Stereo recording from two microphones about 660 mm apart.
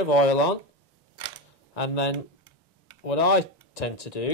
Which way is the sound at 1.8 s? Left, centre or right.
Left.